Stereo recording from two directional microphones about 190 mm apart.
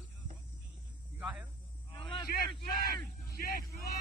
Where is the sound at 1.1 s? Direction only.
5° right (ahead or behind).